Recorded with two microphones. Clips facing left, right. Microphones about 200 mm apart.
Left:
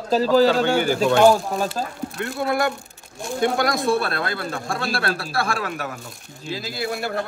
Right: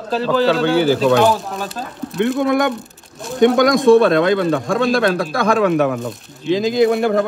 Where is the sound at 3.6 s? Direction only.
90° right.